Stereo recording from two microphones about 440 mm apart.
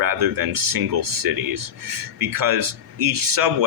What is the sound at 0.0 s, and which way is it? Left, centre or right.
Speech, right.